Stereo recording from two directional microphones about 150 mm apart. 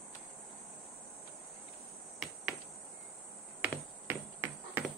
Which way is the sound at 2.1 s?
Centre (ahead or behind).